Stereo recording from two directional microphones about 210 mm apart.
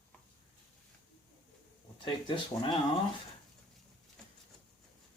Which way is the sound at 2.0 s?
25° left (ahead or behind).